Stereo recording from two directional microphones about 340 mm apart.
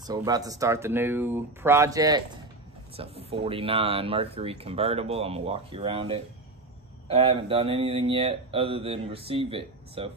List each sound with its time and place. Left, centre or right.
0.0 s speech: centre